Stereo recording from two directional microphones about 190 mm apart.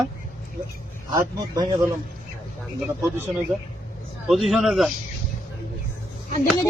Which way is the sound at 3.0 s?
10° right (ahead or behind).